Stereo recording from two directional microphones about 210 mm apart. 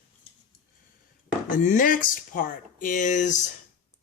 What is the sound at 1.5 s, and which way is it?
A woman's voice, 40° left (ahead or behind).